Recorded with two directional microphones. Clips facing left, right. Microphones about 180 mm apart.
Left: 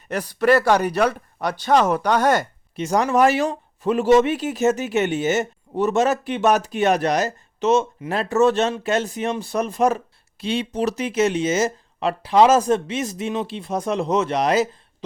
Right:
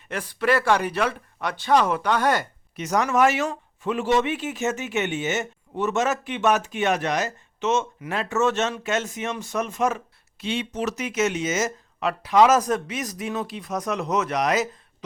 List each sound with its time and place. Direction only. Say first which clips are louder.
0.1 s speech: left 5 dB; 40° left (ahead or behind)
2.7 s speech: left 3 dB; 30° left (ahead or behind)